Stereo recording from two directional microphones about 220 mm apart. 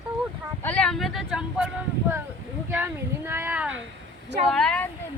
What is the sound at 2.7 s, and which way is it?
Speech, 10° right (ahead or behind).